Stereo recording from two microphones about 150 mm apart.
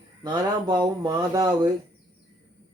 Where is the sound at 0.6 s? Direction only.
30° right (ahead or behind).